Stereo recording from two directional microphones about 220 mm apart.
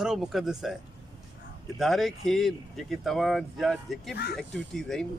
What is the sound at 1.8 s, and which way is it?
Speech, centre (ahead or behind).